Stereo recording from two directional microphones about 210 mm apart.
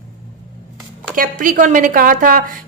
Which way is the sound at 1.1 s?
40° right (ahead or behind).